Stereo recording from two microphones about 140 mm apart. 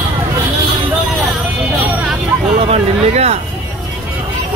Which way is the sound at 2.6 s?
45° right (ahead or behind).